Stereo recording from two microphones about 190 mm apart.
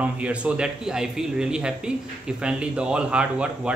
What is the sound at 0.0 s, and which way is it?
Speech, 5° right (ahead or behind).